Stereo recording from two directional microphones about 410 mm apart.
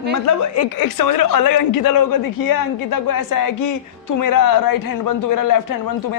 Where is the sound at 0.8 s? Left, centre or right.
Left.